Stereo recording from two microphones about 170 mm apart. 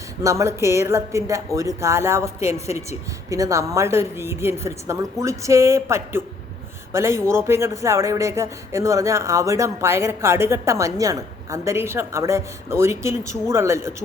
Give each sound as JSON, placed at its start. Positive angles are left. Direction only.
{"t": 0.2, "sound": "speech", "side_deg": -20}